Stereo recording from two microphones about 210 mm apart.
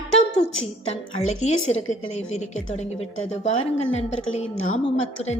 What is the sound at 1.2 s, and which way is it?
A woman's voice, 35° left (ahead or behind).